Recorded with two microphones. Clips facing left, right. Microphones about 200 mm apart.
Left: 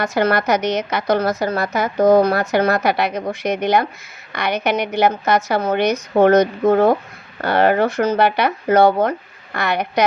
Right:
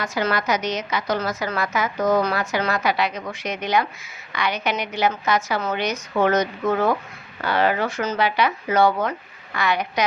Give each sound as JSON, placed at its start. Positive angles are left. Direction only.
{"t": 0.0, "sound": "a woman's voice", "side_deg": 60}
{"t": 1.5, "sound": "a woman's voice", "side_deg": 35}
{"t": 2.1, "sound": "a woman's voice", "side_deg": 60}